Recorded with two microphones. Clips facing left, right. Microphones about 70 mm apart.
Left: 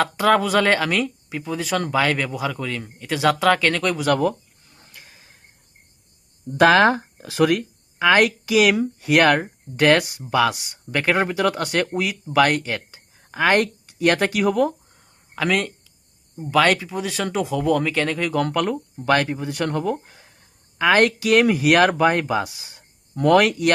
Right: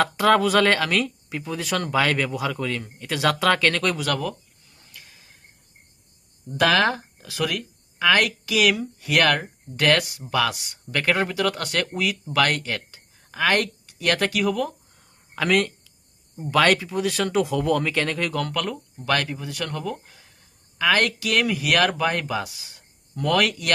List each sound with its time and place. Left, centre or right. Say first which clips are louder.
0.0 s speech: even; centre
4.0 s speech: left 7 dB; left
6.6 s speech: left 5 dB; left
15.4 s speech: even; centre
18.3 s speech: left 5 dB; left